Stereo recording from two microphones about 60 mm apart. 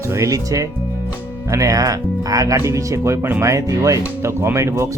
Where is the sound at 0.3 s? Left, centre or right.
Right.